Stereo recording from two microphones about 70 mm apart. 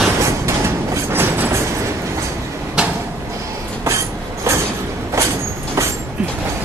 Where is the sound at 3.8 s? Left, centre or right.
Right.